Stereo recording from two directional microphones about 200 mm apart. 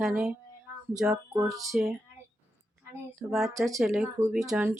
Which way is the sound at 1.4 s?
15° right (ahead or behind).